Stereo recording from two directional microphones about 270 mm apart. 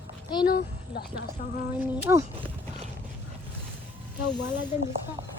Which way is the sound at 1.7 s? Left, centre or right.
Centre.